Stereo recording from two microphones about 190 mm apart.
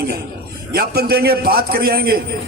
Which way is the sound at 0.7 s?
55° right (ahead or behind).